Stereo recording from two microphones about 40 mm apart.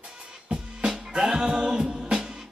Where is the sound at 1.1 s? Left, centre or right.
Centre.